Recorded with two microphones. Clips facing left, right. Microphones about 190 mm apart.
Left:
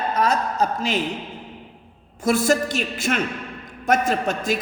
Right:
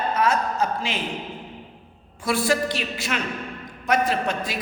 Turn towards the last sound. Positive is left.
turn(degrees=45)  # may be behind; listen again after turning